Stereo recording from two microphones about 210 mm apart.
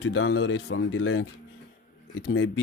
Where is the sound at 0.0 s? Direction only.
65° left (ahead or behind).